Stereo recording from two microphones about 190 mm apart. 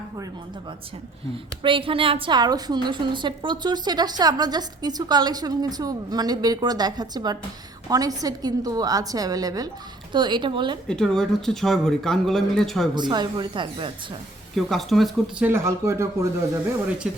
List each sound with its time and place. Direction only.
1.6 s a woman's voice: 25° right (ahead or behind)
10.8 s speech: 5° left (ahead or behind)
12.9 s a woman's voice: 25° right (ahead or behind)
14.5 s speech: centre (ahead or behind)
15.4 s speech: 15° right (ahead or behind)